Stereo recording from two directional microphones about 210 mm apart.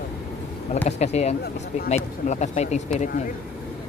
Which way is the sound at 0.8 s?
30° left (ahead or behind).